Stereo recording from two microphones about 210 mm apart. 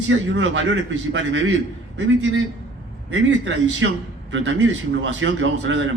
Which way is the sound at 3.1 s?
60° right (ahead or behind).